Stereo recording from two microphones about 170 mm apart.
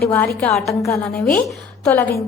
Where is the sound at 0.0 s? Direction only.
15° left (ahead or behind).